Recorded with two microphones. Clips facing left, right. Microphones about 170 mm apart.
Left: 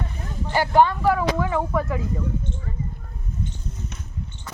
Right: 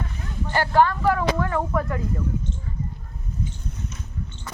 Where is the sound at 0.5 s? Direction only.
15° left (ahead or behind).